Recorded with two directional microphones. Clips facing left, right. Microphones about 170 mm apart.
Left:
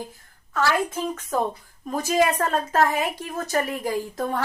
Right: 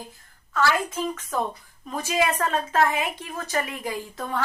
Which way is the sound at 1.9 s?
40° left (ahead or behind).